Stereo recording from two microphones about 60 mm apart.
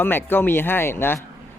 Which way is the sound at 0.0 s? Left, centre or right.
Left.